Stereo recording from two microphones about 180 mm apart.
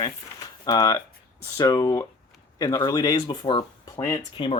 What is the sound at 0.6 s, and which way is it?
Speech, 20° left (ahead or behind).